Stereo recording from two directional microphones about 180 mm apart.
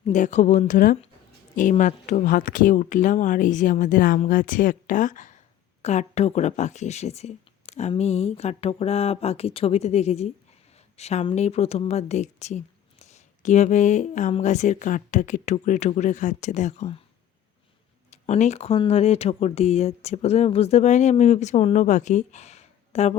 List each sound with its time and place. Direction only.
0.0 s speech: 40° left (ahead or behind)
18.1 s speech: 40° left (ahead or behind)